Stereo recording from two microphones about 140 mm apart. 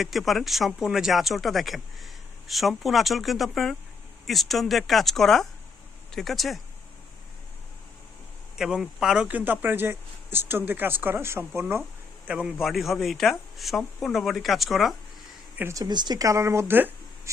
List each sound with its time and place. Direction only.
0.0 s speech: centre (ahead or behind)
8.5 s speech: 5° right (ahead or behind)
12.3 s speech: 5° right (ahead or behind)
15.5 s speech: 20° right (ahead or behind)